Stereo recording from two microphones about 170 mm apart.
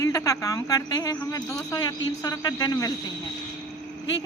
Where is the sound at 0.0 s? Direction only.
20° left (ahead or behind).